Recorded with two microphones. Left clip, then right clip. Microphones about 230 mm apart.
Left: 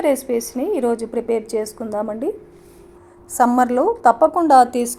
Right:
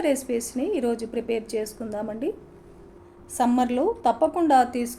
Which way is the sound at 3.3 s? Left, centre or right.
Left.